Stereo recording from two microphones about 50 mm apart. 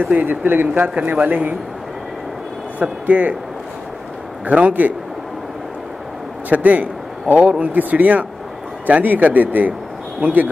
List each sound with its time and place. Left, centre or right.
0.0 s speech: right
0.3 s speech: right
2.8 s a man's voice: right
4.5 s a man's voice: right
6.5 s a man's voice: right